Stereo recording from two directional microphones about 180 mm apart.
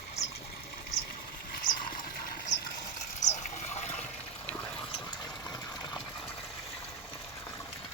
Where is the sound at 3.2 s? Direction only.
40° left (ahead or behind).